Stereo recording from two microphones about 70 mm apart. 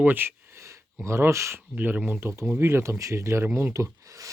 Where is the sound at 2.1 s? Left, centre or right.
Right.